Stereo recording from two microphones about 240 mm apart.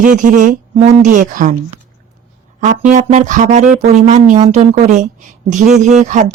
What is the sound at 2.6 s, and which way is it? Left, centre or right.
Speech, right.